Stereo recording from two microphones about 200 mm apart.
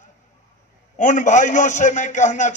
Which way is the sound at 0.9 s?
40° left (ahead or behind).